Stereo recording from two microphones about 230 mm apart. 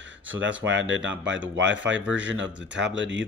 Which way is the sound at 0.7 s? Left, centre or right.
Right.